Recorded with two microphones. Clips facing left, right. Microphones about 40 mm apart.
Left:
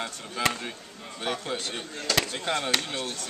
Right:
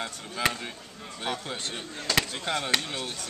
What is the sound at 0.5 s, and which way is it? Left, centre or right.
Speech, centre.